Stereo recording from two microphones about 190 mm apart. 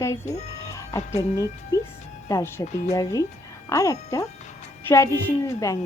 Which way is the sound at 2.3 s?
15° left (ahead or behind).